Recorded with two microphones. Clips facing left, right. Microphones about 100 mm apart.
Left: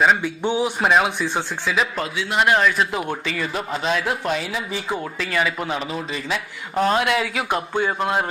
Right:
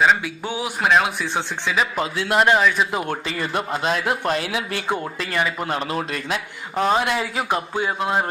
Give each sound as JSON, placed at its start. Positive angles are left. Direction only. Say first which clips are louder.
{"t": 0.0, "sound": "a man's voice", "louder": "left 1 dB", "side_deg": 0}
{"t": 5.9, "sound": "a man's voice", "louder": "right 2 dB", "side_deg": -60}
{"t": 6.2, "sound": "a man's voice", "louder": "even", "side_deg": 0}